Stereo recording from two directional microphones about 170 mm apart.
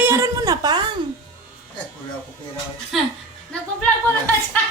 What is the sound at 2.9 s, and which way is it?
Speech, centre (ahead or behind).